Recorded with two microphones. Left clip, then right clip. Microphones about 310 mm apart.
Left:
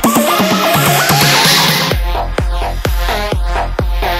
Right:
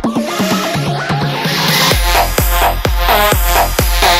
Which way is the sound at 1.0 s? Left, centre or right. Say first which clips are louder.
Left 7 dB; left.